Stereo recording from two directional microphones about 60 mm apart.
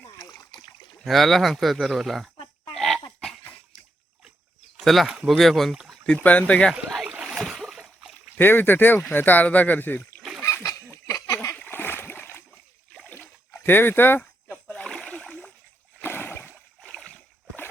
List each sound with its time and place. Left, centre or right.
0.2 s splash: left
1.0 s speech: centre
2.7 s dog: centre
4.8 s speech: centre
6.1 s speech: left
7.3 s splash: centre
8.4 s speech: left
10.4 s a sound: left
11.5 s splash: left
13.5 s dog: left
14.5 s splash: centre
16.0 s a sound: left